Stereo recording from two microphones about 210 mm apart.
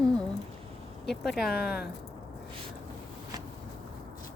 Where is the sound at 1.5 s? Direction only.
50° left (ahead or behind).